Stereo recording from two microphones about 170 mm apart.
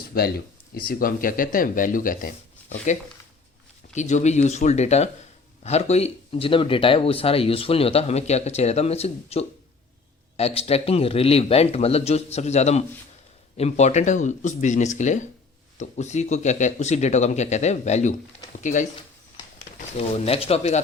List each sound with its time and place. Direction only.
0.1 s speech: 65° left (ahead or behind); by 18.9 s 45° left (ahead or behind)
20.0 s speech: 35° left (ahead or behind)